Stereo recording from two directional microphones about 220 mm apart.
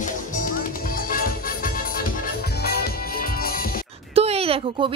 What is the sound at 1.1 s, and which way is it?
Music, 40° left (ahead or behind).